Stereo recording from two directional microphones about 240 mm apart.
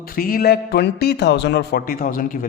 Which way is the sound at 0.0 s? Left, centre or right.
Left.